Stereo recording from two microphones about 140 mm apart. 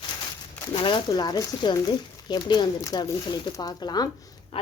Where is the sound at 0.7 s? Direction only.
35° left (ahead or behind).